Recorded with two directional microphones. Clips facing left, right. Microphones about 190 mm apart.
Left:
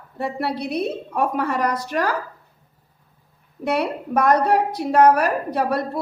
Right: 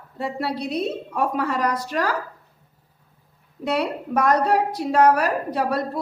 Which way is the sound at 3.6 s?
55° left (ahead or behind).